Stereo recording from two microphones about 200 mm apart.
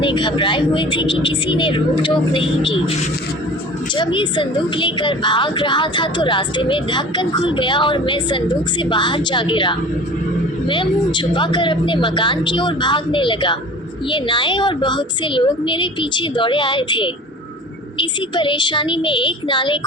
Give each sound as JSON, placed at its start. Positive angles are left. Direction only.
{"t": 0.0, "sound": "a woman's voice", "side_deg": 25}
{"t": 3.9, "sound": "a woman's voice", "side_deg": 25}